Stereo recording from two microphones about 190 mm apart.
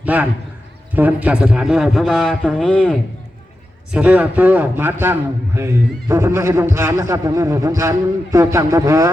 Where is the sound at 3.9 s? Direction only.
5° right (ahead or behind).